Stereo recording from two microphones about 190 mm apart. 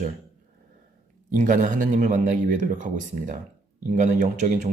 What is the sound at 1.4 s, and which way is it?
Speech, 40° right (ahead or behind).